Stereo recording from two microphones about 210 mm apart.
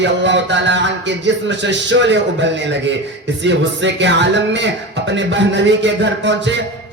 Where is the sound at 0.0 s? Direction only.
60° right (ahead or behind).